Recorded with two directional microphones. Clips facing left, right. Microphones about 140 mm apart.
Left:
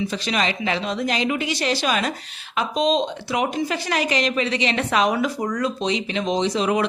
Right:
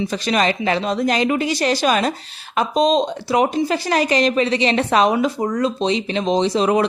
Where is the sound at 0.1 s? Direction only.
45° right (ahead or behind).